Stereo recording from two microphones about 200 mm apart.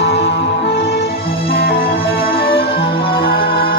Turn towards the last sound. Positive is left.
turn(degrees=50)  # may be behind; listen again after turning